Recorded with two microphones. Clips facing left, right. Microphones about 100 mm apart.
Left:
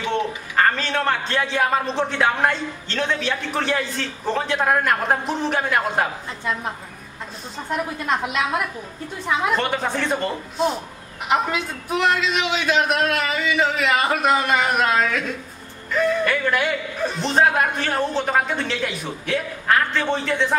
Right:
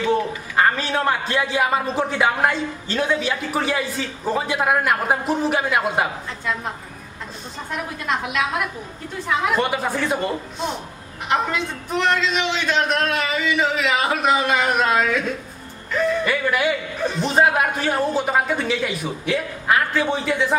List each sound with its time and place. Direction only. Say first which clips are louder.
0.1 s a man's voice: left 1 dB; 10° right (ahead or behind)
9.6 s a man's voice: right 1 dB; 5° right (ahead or behind)